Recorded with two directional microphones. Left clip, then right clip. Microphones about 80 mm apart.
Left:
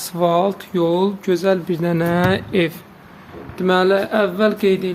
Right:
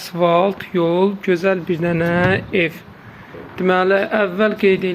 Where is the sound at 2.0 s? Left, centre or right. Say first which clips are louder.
Right 1 dB; left.